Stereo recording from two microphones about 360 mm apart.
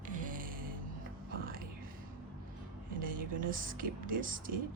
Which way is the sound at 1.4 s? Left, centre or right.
Right.